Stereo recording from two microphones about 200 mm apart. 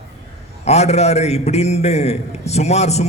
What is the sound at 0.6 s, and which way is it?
A man's voice, 35° left (ahead or behind).